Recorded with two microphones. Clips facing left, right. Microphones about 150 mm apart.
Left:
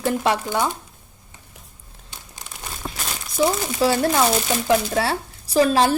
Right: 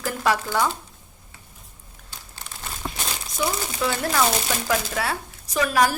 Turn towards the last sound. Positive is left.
turn(degrees=25)  # may be behind; listen again after turning